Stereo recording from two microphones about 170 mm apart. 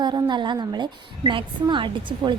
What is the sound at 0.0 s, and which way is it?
A woman's voice, 25° right (ahead or behind).